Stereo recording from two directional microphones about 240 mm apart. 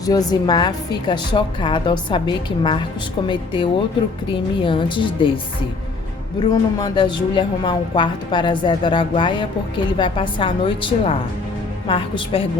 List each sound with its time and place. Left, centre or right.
0.0 s a woman's voice: centre
6.4 s a woman's voice: centre